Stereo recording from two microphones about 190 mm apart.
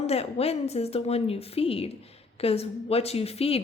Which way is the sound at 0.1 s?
30° left (ahead or behind).